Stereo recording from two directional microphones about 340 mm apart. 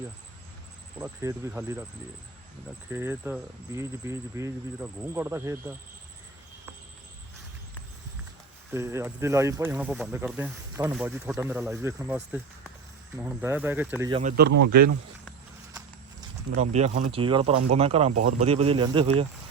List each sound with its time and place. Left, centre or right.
0.9 s speech: centre
2.9 s speech: centre
8.7 s speech: centre
14.2 s speech: right
16.6 s speech: centre